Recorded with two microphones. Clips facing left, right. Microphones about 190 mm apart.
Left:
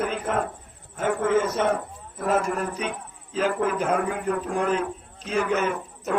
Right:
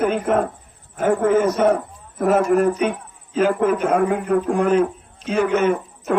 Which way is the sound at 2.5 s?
35° right (ahead or behind).